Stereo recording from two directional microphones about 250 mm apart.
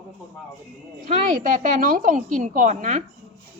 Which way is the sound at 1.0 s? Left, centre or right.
Right.